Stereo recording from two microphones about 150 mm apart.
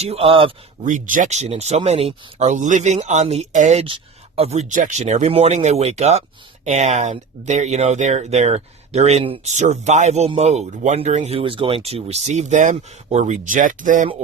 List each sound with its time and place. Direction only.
0.0 s speech: 40° right (ahead or behind)
0.8 s speech: 55° right (ahead or behind)